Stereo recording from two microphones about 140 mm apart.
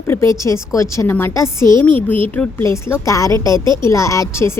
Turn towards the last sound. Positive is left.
turn(degrees=20)  # may be behind; listen again after turning